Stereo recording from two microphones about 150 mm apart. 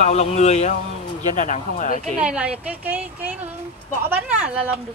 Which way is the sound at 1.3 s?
60° left (ahead or behind).